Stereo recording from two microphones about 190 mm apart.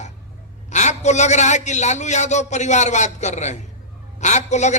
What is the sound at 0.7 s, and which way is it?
A man's voice, 40° left (ahead or behind).